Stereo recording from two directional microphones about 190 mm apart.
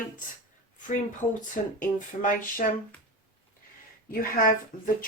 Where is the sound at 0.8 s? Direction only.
40° left (ahead or behind).